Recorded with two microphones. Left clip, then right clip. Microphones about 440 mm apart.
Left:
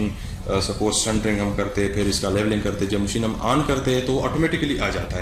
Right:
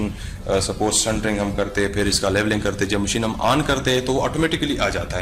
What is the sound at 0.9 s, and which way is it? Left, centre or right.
Speech, right.